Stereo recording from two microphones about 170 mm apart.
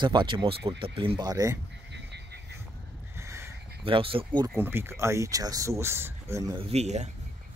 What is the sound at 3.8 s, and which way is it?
Speech, 30° right (ahead or behind).